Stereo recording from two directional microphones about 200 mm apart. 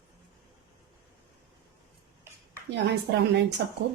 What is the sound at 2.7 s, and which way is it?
Speech, 60° right (ahead or behind).